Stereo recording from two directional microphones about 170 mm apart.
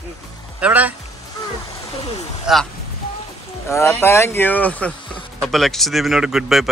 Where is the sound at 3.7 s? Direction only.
15° left (ahead or behind); by 6.6 s centre (ahead or behind).